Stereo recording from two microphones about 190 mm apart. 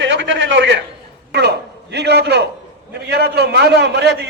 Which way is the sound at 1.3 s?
60° right (ahead or behind).